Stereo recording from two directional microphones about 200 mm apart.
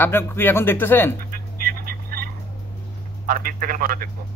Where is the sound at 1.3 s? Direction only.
45° right (ahead or behind).